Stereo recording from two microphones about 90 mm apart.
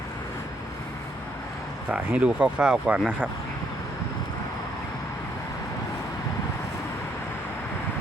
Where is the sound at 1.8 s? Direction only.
15° right (ahead or behind).